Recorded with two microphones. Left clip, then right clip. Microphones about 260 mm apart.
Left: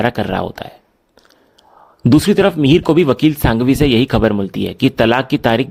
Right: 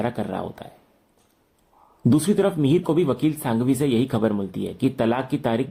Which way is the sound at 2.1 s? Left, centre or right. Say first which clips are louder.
Left 9 dB; left.